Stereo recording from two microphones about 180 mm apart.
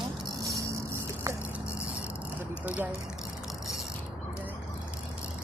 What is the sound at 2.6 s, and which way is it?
Speech, 10° right (ahead or behind).